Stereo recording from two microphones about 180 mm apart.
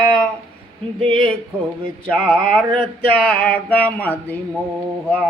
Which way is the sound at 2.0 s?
5° left (ahead or behind).